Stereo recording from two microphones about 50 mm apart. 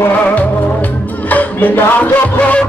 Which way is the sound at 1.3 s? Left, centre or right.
Left.